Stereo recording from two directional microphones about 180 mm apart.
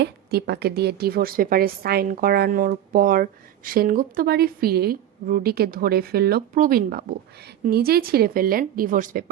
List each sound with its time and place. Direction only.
0.0 s a woman's voice: 65° right (ahead or behind)